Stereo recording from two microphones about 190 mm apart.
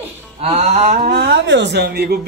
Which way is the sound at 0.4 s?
35° right (ahead or behind).